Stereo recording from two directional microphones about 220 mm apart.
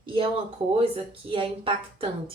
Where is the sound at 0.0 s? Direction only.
25° right (ahead or behind).